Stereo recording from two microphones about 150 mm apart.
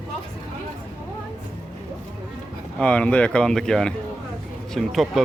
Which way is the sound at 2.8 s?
5° left (ahead or behind).